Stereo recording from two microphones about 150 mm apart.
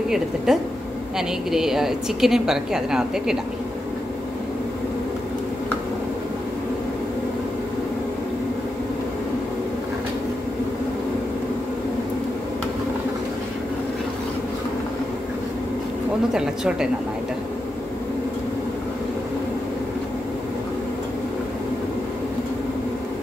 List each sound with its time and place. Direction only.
0.5 s a woman's voice: 5° right (ahead or behind)
16.3 s a woman's voice: 5° right (ahead or behind)